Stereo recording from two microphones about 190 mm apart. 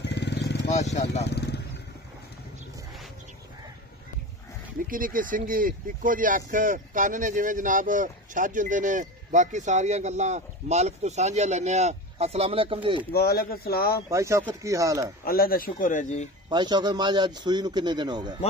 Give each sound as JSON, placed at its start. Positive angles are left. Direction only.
{"t": 0.0, "sound": "vehicle", "side_deg": 65}
{"t": 4.8, "sound": "speech", "side_deg": -45}
{"t": 13.1, "sound": "speech", "side_deg": 55}
{"t": 14.0, "sound": "speech", "side_deg": -15}
{"t": 15.2, "sound": "speech", "side_deg": 50}
{"t": 16.4, "sound": "a man's voice", "side_deg": -25}